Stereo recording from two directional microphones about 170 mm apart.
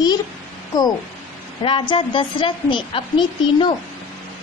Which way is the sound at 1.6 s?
30° left (ahead or behind).